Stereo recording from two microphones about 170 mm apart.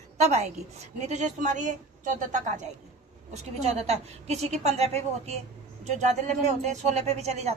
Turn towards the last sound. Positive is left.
turn(degrees=-40)  # may be behind; listen again after turning